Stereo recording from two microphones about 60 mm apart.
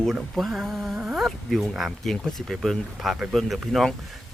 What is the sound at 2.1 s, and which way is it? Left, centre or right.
Speech, centre.